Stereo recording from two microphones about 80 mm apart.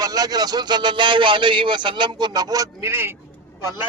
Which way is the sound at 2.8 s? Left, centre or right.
Right.